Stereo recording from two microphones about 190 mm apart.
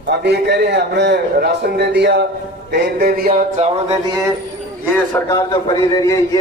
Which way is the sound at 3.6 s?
40° right (ahead or behind).